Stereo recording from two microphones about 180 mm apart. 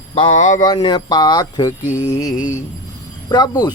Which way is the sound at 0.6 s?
25° left (ahead or behind).